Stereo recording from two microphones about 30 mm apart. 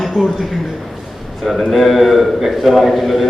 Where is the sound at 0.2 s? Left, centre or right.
Centre.